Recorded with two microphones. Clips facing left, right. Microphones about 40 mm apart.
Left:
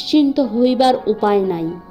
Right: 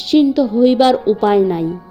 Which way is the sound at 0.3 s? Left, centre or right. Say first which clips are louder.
Right 3 dB; right.